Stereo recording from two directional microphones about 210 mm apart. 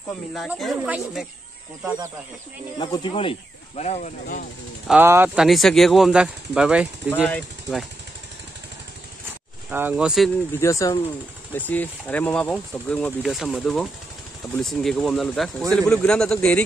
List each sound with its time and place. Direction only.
0.3 s speech: centre (ahead or behind)
2.8 s speech: 20° left (ahead or behind); by 4.5 s 35° left (ahead or behind)
4.8 s speech: 10° right (ahead or behind)
9.7 s speech: 10° right (ahead or behind)
10.6 s speech: 15° left (ahead or behind)